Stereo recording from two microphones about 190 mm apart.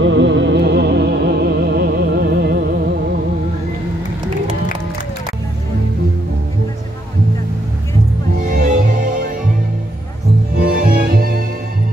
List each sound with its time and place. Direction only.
0.0 s music: 70° right (ahead or behind); by 3.0 s 55° right (ahead or behind)
8.4 s music: 45° right (ahead or behind)
10.6 s music: 50° right (ahead or behind)